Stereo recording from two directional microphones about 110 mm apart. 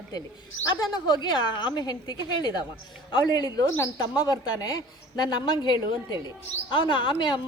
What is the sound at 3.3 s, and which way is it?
Speech, 35° left (ahead or behind).